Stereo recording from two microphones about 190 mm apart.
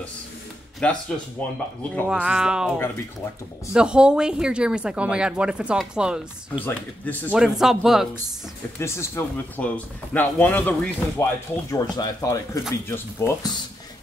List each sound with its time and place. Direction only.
0.8 s speech: 5° left (ahead or behind)
2.0 s speech: 5° right (ahead or behind)
6.6 s speech: 10° left (ahead or behind)
7.3 s speech: 5° right (ahead or behind)
8.7 s speech: 15° left (ahead or behind)
11.7 s speech: 20° left (ahead or behind)